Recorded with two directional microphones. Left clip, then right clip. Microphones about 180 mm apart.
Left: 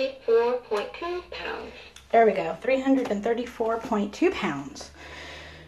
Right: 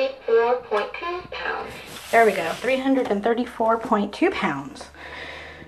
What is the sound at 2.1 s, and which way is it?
Speech, 20° right (ahead or behind).